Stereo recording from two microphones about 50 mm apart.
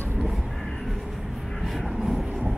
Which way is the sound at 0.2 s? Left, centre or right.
Centre.